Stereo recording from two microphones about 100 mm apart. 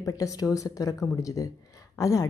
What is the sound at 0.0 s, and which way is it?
A woman's voice, 35° left (ahead or behind).